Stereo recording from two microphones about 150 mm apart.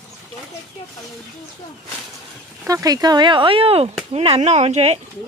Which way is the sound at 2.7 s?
25° right (ahead or behind).